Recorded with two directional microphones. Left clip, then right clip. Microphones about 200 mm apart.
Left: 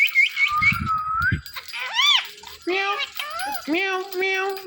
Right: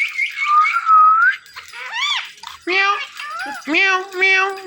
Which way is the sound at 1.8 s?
30° left (ahead or behind).